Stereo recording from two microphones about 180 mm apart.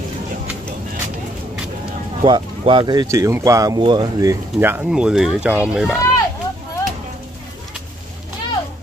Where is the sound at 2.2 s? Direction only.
25° right (ahead or behind); by 6.0 s 5° right (ahead or behind).